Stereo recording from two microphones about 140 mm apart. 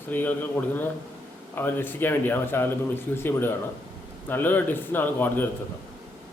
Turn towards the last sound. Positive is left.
turn(degrees=10)  # may be behind; listen again after turning